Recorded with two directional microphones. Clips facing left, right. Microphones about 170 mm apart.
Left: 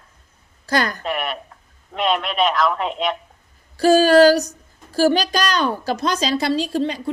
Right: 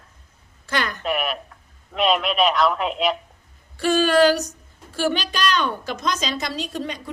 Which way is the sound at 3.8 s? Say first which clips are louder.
Left 5 dB; 40° left (ahead or behind).